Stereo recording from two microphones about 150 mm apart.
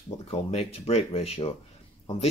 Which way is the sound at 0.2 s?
45° left (ahead or behind).